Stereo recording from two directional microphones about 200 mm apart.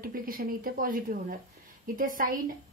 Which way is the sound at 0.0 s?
45° right (ahead or behind).